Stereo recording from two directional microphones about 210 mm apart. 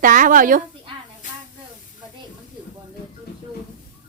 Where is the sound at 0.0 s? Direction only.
40° right (ahead or behind).